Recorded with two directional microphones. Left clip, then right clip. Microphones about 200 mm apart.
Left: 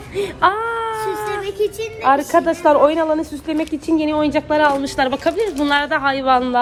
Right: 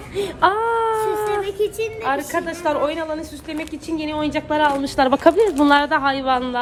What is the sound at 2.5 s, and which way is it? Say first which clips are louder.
A woman's voice: left 7 dB; 5° right (ahead or behind).